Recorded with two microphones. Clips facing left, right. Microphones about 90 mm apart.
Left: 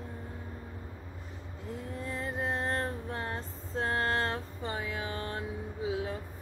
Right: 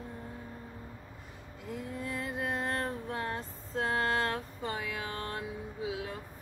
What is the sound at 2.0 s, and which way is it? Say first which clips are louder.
Music: left 2 dB; 30° left (ahead or behind).